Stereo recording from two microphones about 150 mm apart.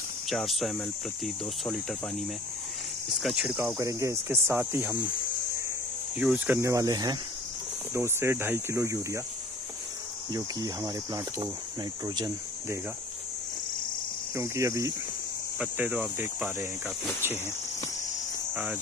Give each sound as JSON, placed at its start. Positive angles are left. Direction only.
{"t": 0.3, "sound": "speech", "side_deg": 0}
{"t": 6.1, "sound": "speech", "side_deg": -10}
{"t": 10.3, "sound": "speech", "side_deg": -25}
{"t": 14.3, "sound": "speech", "side_deg": -20}
{"t": 15.6, "sound": "speech", "side_deg": -10}
{"t": 18.5, "sound": "cricket", "side_deg": -10}